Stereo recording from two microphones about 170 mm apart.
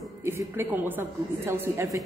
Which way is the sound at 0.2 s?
15° right (ahead or behind).